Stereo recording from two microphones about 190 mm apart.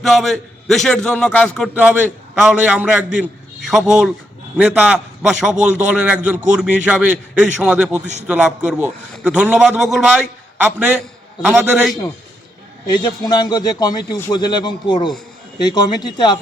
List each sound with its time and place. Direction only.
0.0 s a man's voice: centre (ahead or behind)
1.7 s a man's voice: 10° right (ahead or behind)
12.9 s a man's voice: 20° left (ahead or behind)